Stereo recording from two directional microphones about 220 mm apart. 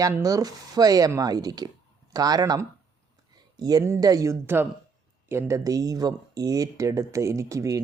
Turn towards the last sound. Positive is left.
turn(degrees=-15)  # may be behind; listen again after turning